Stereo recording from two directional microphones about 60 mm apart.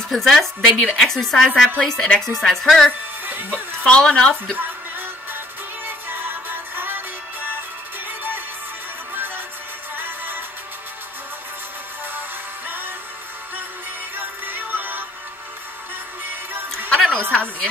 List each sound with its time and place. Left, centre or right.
0.1 s a woman's voice: centre
3.3 s speech: right
3.8 s a woman's voice: centre
4.6 s music: right
9.9 s music: right
12.6 s music: right
14.1 s music: right
17.1 s a woman's voice: centre